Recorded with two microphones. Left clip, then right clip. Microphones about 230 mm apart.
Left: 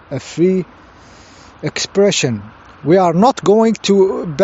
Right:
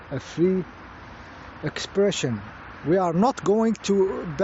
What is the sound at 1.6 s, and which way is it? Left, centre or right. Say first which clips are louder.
Speech: left 9 dB; left.